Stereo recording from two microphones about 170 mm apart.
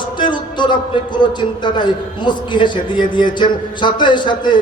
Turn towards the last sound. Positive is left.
turn(degrees=25)  # may be behind; listen again after turning